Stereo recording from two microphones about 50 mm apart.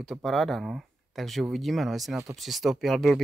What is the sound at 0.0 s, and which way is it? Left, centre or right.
Speech, centre.